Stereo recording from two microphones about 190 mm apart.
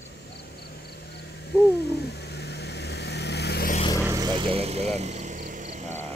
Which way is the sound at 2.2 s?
60° left (ahead or behind).